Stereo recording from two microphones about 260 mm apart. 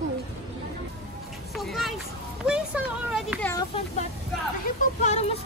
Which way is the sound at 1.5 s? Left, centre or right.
Centre.